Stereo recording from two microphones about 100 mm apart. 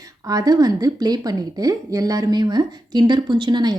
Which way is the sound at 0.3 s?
40° right (ahead or behind).